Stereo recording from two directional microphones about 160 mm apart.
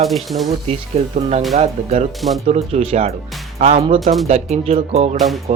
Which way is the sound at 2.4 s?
40° right (ahead or behind).